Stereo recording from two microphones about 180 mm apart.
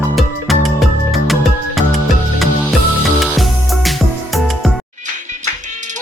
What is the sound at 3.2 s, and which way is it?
Music, centre (ahead or behind).